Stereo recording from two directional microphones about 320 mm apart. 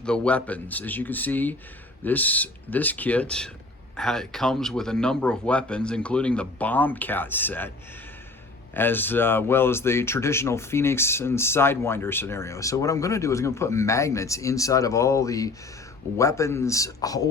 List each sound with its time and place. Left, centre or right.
0.0 s speech: centre
8.7 s speech: centre